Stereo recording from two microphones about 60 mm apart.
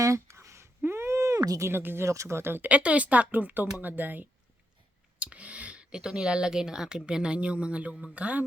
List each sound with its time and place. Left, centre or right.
0.0 s a sound: right
1.6 s speech: right
2.0 s speech: right
2.6 s speech: right